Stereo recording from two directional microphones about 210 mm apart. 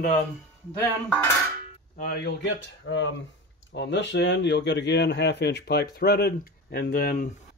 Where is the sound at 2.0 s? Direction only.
50° left (ahead or behind).